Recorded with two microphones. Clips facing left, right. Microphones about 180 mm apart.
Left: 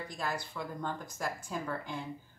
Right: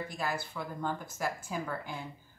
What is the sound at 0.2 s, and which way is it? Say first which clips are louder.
Speech: even; 5° right (ahead or behind).